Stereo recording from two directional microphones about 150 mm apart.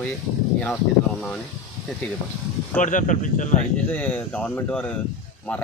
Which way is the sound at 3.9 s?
10° left (ahead or behind).